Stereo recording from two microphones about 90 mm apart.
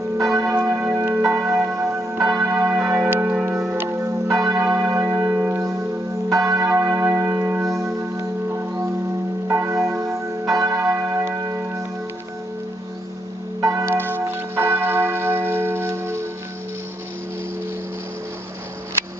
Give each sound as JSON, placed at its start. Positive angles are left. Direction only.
{"t": 0.2, "sound": "church bell", "side_deg": -35}
{"t": 0.6, "sound": "church bell", "side_deg": -15}
{"t": 4.6, "sound": "church bell", "side_deg": -20}
{"t": 6.2, "sound": "church bell", "side_deg": -35}
{"t": 6.7, "sound": "church bell", "side_deg": -25}
{"t": 7.7, "sound": "music", "side_deg": -35}
{"t": 9.5, "sound": "church bell", "side_deg": -30}
{"t": 13.6, "sound": "church bell", "side_deg": -35}